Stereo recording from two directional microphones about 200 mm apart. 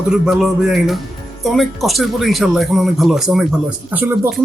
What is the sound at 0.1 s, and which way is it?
Speech, centre (ahead or behind).